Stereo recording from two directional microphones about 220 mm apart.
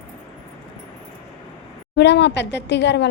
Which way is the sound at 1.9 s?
50° left (ahead or behind).